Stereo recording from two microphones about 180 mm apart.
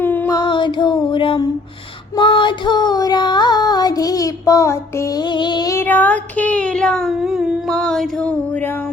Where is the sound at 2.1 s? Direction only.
25° left (ahead or behind).